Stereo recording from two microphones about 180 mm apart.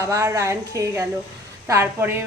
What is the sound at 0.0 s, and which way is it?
A woman's voice, 15° right (ahead or behind).